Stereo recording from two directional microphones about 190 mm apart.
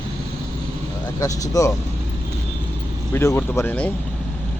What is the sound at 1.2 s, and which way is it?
Speech, 15° left (ahead or behind).